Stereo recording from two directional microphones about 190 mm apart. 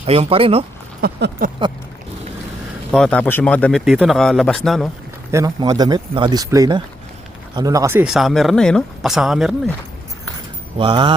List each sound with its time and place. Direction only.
0.0 s speech: 30° right (ahead or behind)
1.0 s a sound: 55° right (ahead or behind)
2.9 s speech: 5° left (ahead or behind)
5.3 s speech: 20° right (ahead or behind); by 9.6 s centre (ahead or behind)
10.8 s speech: 25° right (ahead or behind)